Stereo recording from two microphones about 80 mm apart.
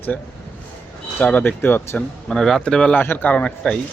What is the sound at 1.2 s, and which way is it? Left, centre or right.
Speech, left.